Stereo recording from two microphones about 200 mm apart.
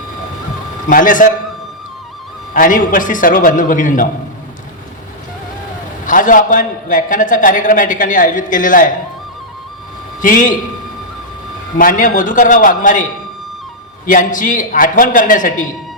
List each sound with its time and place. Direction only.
0.9 s a man's voice: 40° left (ahead or behind)
2.5 s a man's voice: 40° left (ahead or behind)
6.1 s a man's voice: 40° left (ahead or behind)
10.2 s a man's voice: 40° left (ahead or behind)
11.8 s a man's voice: 45° left (ahead or behind)
14.1 s a man's voice: 40° left (ahead or behind)